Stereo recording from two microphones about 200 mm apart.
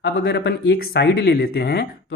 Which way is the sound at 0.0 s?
55° left (ahead or behind).